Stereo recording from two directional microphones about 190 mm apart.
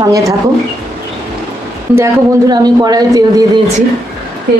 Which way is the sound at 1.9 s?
15° right (ahead or behind).